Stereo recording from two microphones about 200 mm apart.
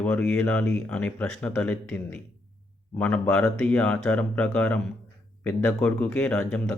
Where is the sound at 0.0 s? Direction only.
5° left (ahead or behind).